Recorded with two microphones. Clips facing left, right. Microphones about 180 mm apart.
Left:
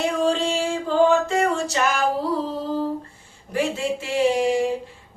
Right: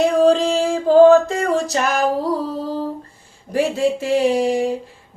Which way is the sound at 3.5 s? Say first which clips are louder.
Right 6 dB; 40° right (ahead or behind).